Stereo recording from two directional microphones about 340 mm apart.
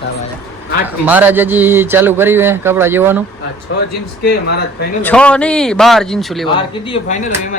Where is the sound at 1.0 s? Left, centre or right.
Centre.